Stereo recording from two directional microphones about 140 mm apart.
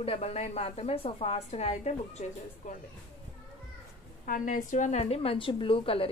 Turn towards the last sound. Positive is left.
turn(degrees=40)  # may be behind; listen again after turning